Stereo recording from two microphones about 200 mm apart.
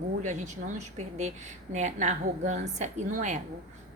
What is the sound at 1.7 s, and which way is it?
A woman's voice, 35° right (ahead or behind).